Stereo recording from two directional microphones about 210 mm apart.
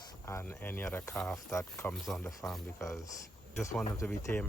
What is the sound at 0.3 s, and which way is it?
Speech, 10° left (ahead or behind).